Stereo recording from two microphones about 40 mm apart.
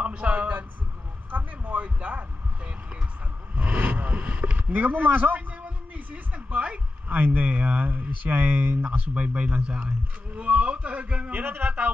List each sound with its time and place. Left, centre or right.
0.0 s a sound: right
1.3 s heart sounds: right
3.7 s vehicle: right
4.1 s boat: right
4.6 s a man's voice: right
11.4 s music: right